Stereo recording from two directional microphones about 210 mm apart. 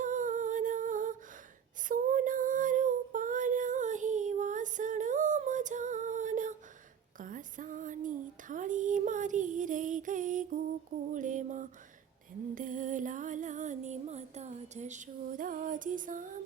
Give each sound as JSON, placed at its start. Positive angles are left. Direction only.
{"t": 0.0, "sound": "humming", "side_deg": -35}
{"t": 1.9, "sound": "female singing", "side_deg": -40}
{"t": 7.2, "sound": "a sound", "side_deg": -40}
{"t": 11.1, "sound": "music", "side_deg": -35}